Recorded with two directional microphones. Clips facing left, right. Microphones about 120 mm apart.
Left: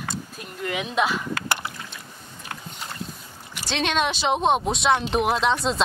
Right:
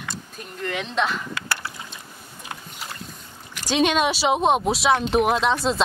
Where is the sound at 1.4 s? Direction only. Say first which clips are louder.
Left 2 dB; 20° left (ahead or behind).